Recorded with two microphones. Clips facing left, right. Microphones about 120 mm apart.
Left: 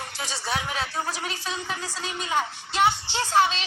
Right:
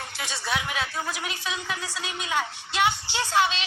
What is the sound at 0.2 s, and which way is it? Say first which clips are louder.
A woman's voice: even; 35° left (ahead or behind).